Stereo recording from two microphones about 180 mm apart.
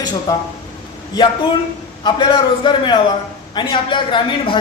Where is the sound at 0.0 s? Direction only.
20° left (ahead or behind).